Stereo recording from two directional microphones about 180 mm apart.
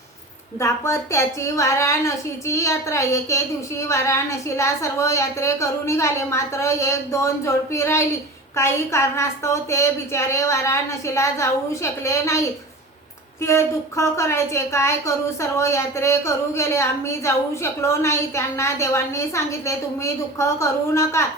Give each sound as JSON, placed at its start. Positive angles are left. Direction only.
{"t": 0.6, "sound": "a woman's voice", "side_deg": 15}
{"t": 13.4, "sound": "a woman's voice", "side_deg": 15}